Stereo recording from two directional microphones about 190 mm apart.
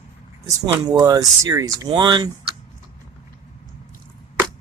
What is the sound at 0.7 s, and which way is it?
Speech, 20° right (ahead or behind).